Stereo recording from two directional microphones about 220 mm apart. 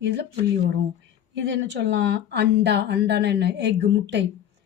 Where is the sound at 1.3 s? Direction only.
55° right (ahead or behind).